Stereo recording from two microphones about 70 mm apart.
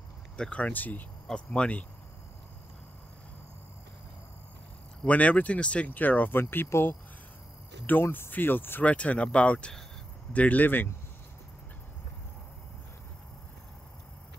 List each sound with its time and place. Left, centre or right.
0.4 s speech: centre
1.3 s speech: centre
5.0 s speech: centre
8.8 s speech: centre